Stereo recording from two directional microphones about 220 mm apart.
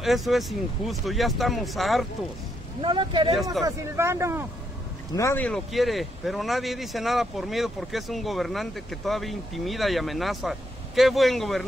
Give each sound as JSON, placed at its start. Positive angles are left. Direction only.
{"t": 0.0, "sound": "speech", "side_deg": 0}
{"t": 2.8, "sound": "speech", "side_deg": -20}
{"t": 5.1, "sound": "speech", "side_deg": 10}